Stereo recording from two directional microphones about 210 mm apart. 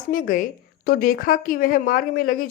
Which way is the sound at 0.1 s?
40° left (ahead or behind).